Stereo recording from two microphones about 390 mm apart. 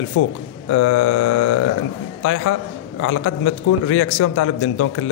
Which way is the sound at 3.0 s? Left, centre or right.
Left.